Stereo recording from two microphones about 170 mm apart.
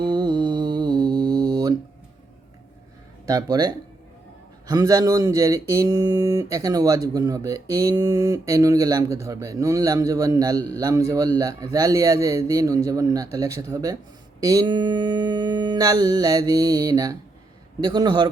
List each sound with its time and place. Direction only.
0.0 s music: 25° right (ahead or behind)
3.2 s speech: 20° right (ahead or behind)